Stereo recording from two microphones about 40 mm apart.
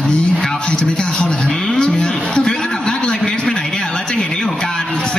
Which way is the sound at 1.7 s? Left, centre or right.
Centre.